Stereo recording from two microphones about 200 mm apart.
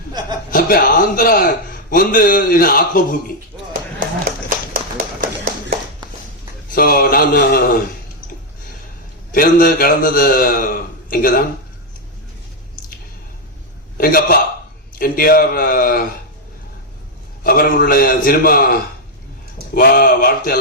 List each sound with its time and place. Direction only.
0.5 s a man's voice: 45° left (ahead or behind)
4.4 s tap: 45° right (ahead or behind)
6.7 s a man's voice: 50° left (ahead or behind)
9.3 s a man's voice: 45° left (ahead or behind)
14.0 s a man's voice: 45° left (ahead or behind)
17.4 s a man's voice: 45° left (ahead or behind)
19.7 s a man's voice: 50° left (ahead or behind)